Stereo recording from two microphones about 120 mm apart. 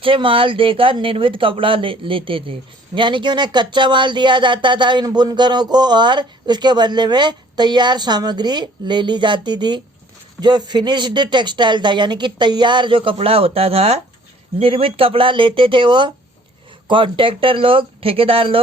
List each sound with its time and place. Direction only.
0.0 s speech: 45° right (ahead or behind)
13.1 s speech: 55° right (ahead or behind)